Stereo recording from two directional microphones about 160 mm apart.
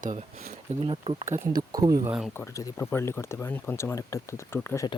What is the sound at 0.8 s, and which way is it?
Speech, 35° right (ahead or behind).